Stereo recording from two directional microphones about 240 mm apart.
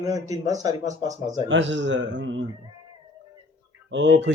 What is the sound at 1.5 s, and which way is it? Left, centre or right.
Speech, right.